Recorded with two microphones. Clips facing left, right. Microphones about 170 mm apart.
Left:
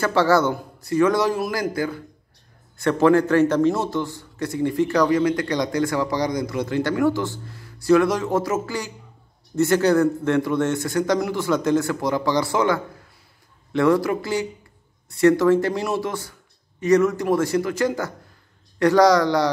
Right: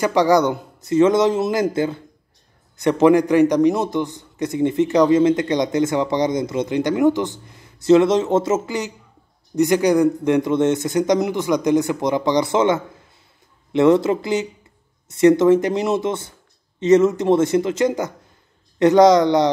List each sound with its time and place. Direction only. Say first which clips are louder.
0.0 s a man's voice: right 3 dB; 15° right (ahead or behind)